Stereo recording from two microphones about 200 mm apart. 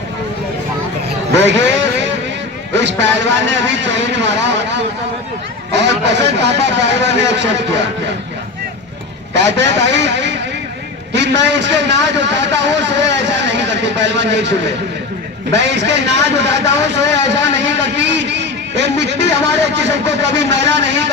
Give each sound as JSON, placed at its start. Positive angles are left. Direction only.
{"t": 1.3, "sound": "a sound", "side_deg": -60}
{"t": 2.7, "sound": "a man's voice", "side_deg": -60}
{"t": 9.3, "sound": "a man's voice", "side_deg": -60}